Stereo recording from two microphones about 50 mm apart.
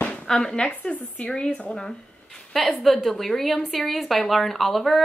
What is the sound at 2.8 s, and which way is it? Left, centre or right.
Speech, centre.